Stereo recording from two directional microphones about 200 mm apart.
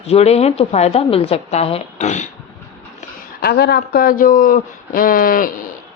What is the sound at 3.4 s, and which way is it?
A man's voice, 55° left (ahead or behind).